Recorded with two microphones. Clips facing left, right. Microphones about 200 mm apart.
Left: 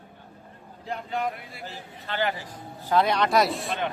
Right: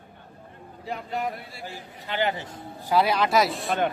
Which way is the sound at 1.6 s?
15° right (ahead or behind).